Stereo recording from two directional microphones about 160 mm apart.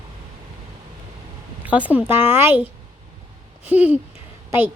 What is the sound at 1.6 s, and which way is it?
Speech, 10° right (ahead or behind).